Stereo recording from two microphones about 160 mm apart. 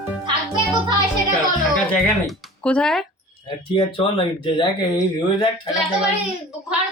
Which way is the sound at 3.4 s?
30° left (ahead or behind).